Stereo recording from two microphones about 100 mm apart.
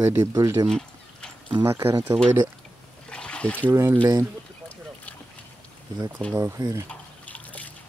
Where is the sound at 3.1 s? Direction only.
10° left (ahead or behind).